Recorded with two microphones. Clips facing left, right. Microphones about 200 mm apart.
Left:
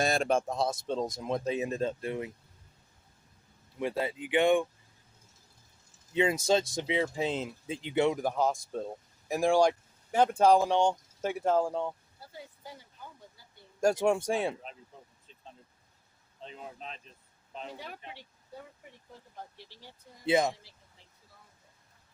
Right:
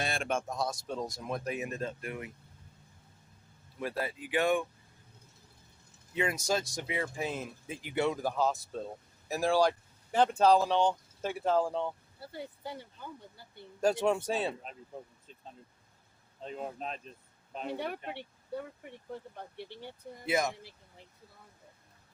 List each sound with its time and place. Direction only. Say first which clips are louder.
0.0 s speech: left 6 dB; 40° left (ahead or behind)
3.8 s speech: left 4 dB; 20° left (ahead or behind)
6.4 s speech: left 5 dB; 25° left (ahead or behind); by 11.9 s 10° left (ahead or behind)
12.2 s speech: right 5 dB; 65° right (ahead or behind)
13.4 s a sound: right 6 dB; 60° right (ahead or behind)
13.8 s speech: left 2 dB; 10° left (ahead or behind)
16.4 s speech: right 6 dB; 45° right (ahead or behind)
17.5 s speech: right 6 dB; 55° right (ahead or behind)
20.2 s speech: left 4 dB; 30° left (ahead or behind)
20.6 s speech: right 8 dB; 60° right (ahead or behind)